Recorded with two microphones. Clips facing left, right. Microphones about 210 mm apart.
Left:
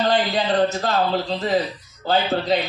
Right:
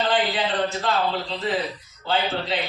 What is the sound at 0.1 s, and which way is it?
Speech, 40° left (ahead or behind).